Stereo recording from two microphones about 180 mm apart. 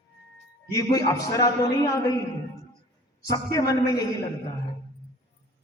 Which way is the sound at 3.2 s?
20° left (ahead or behind).